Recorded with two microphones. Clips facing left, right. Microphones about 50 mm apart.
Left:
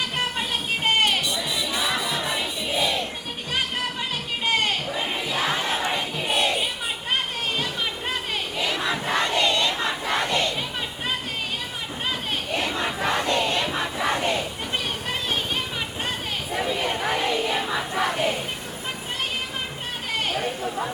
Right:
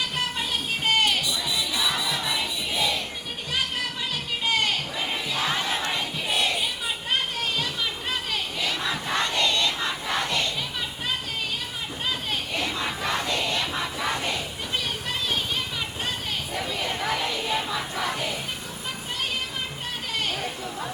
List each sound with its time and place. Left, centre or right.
0.9 s music: left
4.4 s a sound: left
5.6 s crowd: left
8.3 s crowd: left
12.5 s crowd: left
13.7 s a sound: left
16.6 s crowd: left
18.0 s music: left
20.1 s chatter: left